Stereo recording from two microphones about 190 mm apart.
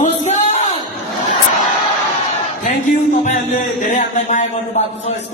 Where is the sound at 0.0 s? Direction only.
35° left (ahead or behind).